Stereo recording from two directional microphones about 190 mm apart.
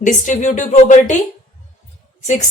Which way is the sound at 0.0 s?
40° left (ahead or behind).